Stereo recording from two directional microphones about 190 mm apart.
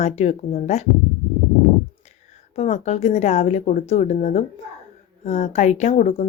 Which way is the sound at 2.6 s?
35° left (ahead or behind).